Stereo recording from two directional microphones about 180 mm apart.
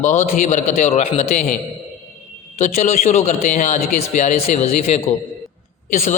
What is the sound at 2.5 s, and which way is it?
A man's voice, 40° left (ahead or behind).